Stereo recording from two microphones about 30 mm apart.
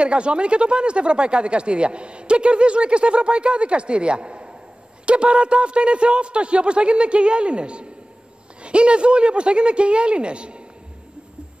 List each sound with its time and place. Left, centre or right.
0.0 s speech: right